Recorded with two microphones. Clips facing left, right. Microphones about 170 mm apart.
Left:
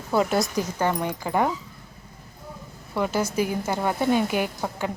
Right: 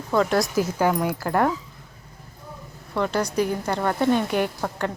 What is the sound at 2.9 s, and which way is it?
A woman's voice, 5° left (ahead or behind).